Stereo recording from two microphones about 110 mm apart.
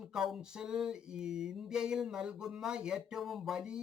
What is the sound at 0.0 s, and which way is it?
Speech, centre (ahead or behind).